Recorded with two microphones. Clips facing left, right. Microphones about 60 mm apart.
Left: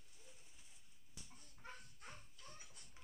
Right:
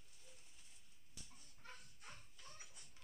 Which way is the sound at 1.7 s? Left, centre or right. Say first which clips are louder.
Left 2 dB; centre.